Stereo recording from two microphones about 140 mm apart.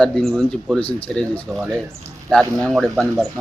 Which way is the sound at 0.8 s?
40° left (ahead or behind).